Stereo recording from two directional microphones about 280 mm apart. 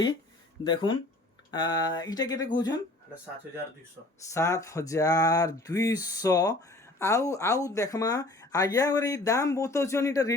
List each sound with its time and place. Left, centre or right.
0.6 s speech: centre
4.3 s speech: centre